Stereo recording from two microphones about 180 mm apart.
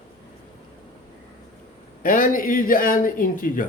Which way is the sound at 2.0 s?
50° left (ahead or behind).